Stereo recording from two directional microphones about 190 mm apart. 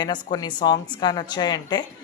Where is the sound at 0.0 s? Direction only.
20° left (ahead or behind).